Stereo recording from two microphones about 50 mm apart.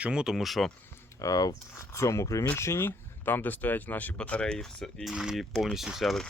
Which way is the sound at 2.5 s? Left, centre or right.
Left.